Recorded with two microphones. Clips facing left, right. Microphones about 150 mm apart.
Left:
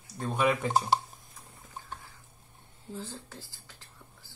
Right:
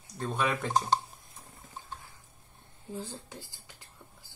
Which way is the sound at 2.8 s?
15° right (ahead or behind).